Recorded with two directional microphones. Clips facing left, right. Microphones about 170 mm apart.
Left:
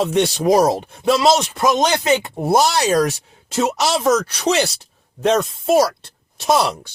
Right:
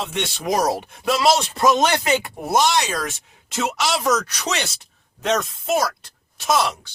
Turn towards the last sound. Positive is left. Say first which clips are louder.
# left 3 dB
turn(degrees=30)  # may be behind; listen again after turning